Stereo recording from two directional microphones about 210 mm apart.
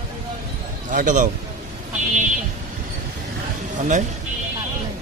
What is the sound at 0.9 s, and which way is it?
Speech, 40° right (ahead or behind).